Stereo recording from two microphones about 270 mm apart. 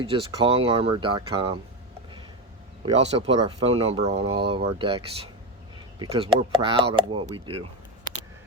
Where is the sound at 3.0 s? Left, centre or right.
Right.